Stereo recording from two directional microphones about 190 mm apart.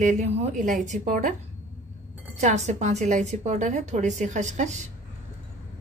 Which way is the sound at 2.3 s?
35° right (ahead or behind).